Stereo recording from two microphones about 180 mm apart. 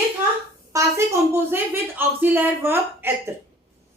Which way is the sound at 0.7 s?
15° right (ahead or behind).